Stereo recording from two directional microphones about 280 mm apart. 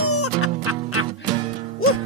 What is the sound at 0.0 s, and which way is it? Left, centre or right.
Music, left.